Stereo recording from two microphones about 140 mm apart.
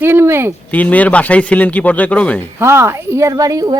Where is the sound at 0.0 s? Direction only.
15° right (ahead or behind).